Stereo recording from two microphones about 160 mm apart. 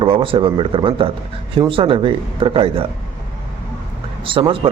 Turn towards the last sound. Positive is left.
turn(degrees=-35)  # may be behind; listen again after turning